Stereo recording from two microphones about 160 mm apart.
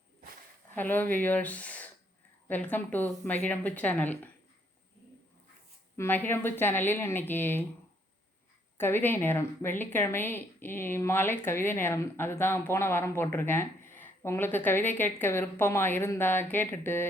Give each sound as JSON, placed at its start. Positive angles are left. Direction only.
{"t": 0.7, "sound": "speech", "side_deg": 10}
{"t": 6.0, "sound": "speech", "side_deg": 10}
{"t": 8.8, "sound": "speech", "side_deg": 15}